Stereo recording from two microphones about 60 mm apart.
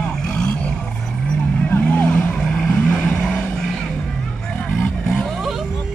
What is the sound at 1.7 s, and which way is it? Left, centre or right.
Vehicle, left.